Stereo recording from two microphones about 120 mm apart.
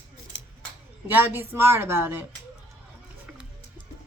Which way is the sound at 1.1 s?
15° right (ahead or behind).